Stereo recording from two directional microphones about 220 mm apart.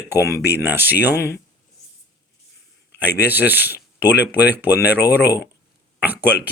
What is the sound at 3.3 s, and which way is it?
Speech, 10° right (ahead or behind).